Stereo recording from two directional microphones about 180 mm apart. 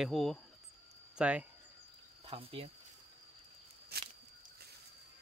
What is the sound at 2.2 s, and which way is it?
Speech, 30° right (ahead or behind).